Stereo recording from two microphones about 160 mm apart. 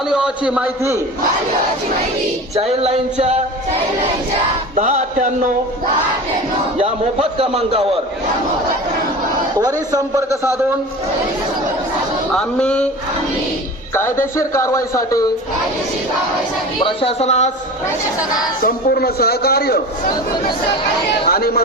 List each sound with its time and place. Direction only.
0.1 s a man's voice: 5° right (ahead or behind)
2.6 s a man's voice: 40° right (ahead or behind)
4.7 s music: 45° right (ahead or behind)
6.7 s a man's voice: 35° right (ahead or behind)
9.6 s speech: 20° right (ahead or behind)
12.3 s speech: 5° left (ahead or behind)
13.9 s speech: 15° left (ahead or behind)
16.8 s speech: 35° left (ahead or behind)
18.6 s a man's voice: 70° left (ahead or behind)
21.2 s speech: 75° left (ahead or behind)